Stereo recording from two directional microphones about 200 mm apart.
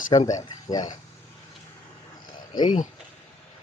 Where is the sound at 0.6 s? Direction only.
20° left (ahead or behind).